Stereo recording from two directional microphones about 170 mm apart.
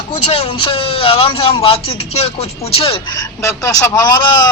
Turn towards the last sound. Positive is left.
turn(degrees=25)  # may be behind; listen again after turning